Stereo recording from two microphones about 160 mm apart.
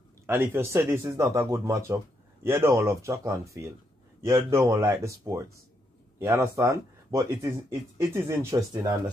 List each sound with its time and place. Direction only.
0.3 s speech: 15° right (ahead or behind)